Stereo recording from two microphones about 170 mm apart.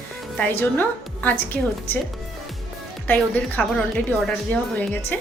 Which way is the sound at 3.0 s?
10° left (ahead or behind).